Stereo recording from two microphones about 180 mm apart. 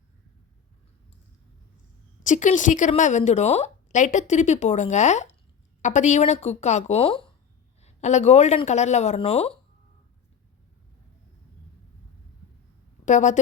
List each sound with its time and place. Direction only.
2.2 s a woman's voice: 45° left (ahead or behind)
13.1 s a woman's voice: 40° left (ahead or behind)